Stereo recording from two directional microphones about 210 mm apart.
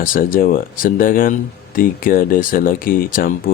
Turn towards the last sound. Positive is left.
turn(degrees=40)  # may be behind; listen again after turning